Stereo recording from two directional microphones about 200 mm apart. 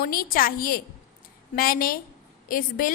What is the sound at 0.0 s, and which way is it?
A woman's voice, 45° left (ahead or behind).